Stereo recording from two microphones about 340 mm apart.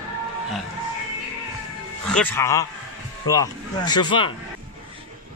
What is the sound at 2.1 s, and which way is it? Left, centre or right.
Speech, centre.